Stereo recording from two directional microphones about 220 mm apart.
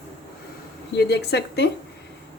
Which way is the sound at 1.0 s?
50° left (ahead or behind).